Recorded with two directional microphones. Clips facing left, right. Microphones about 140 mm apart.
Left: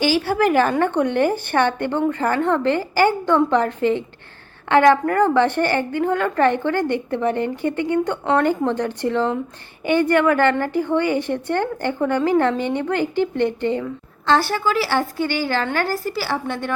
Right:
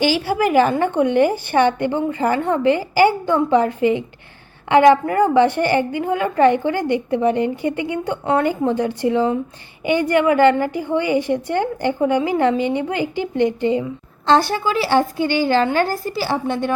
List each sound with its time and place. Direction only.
0.3 s a woman's voice: 10° right (ahead or behind)